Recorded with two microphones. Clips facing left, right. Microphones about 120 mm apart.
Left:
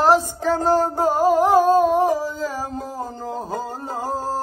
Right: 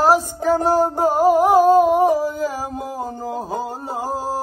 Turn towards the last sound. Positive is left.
turn(degrees=-10)  # may be behind; listen again after turning